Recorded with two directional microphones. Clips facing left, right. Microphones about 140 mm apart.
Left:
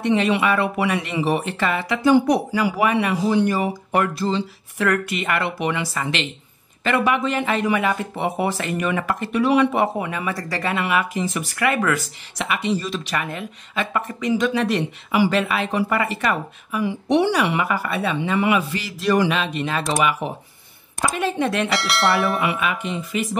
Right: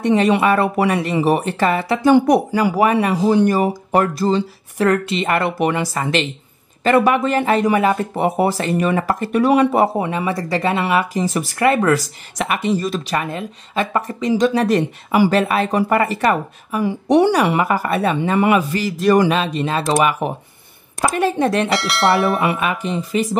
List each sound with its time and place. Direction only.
0.0 s speech: 40° right (ahead or behind)
5.4 s speech: 45° right (ahead or behind)
20.0 s speech: 50° right (ahead or behind)
21.6 s speech: centre (ahead or behind)
22.4 s speech: 45° right (ahead or behind)